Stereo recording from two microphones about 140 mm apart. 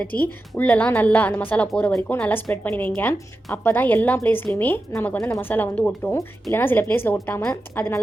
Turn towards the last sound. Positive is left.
turn(degrees=15)  # may be behind; listen again after turning